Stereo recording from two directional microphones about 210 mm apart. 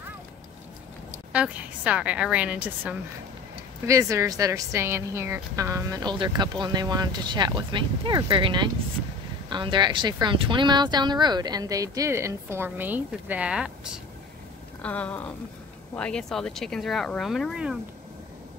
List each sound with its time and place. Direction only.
1.3 s a woman's voice: 5° right (ahead or behind)
14.8 s a sound: 5° left (ahead or behind)
15.9 s speech: 5° left (ahead or behind)